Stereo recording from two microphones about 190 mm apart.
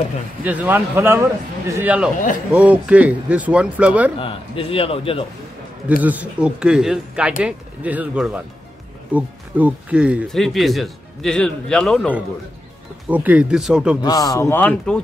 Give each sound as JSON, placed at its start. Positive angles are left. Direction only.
{"t": 0.4, "sound": "speech", "side_deg": -10}
{"t": 4.2, "sound": "a man's voice", "side_deg": 30}
{"t": 5.9, "sound": "speech", "side_deg": -10}
{"t": 13.1, "sound": "speech", "side_deg": -10}
{"t": 14.0, "sound": "speech", "side_deg": 20}